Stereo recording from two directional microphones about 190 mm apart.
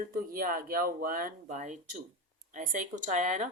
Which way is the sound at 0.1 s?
50° right (ahead or behind).